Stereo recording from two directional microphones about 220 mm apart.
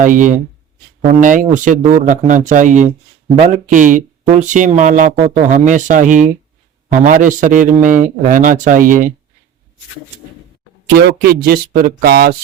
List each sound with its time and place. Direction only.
0.0 s speech: 35° right (ahead or behind)
10.9 s speech: 40° right (ahead or behind)